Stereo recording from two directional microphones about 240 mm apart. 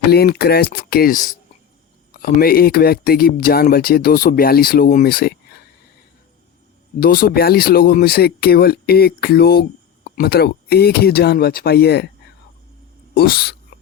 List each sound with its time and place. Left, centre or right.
0.1 s speech: left
7.0 s speech: left
13.1 s a sound: left